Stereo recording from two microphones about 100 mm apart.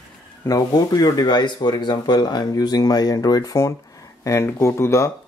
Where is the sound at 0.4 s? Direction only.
40° left (ahead or behind).